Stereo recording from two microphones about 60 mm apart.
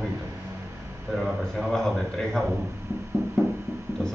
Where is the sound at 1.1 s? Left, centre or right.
Centre.